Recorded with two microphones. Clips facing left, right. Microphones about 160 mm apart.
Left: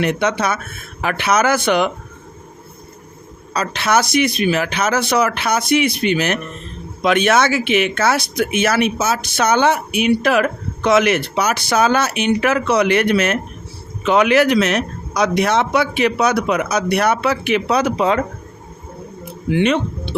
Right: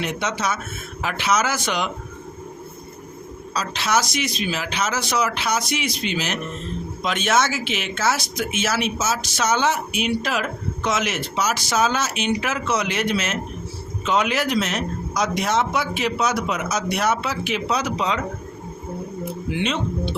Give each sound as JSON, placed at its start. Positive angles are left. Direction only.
{"t": 0.0, "sound": "speech", "side_deg": 60}
{"t": 3.5, "sound": "speech", "side_deg": 55}
{"t": 19.5, "sound": "speech", "side_deg": 60}